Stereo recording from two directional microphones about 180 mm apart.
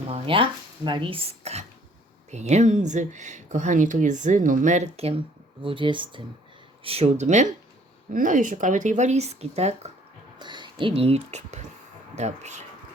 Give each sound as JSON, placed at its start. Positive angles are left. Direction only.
{"t": 0.1, "sound": "speech", "side_deg": -30}
{"t": 10.3, "sound": "speech", "side_deg": -25}